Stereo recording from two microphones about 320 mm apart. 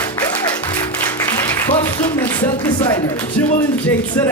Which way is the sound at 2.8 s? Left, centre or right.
Centre.